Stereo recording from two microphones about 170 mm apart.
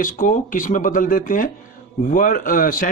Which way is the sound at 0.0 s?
50° left (ahead or behind).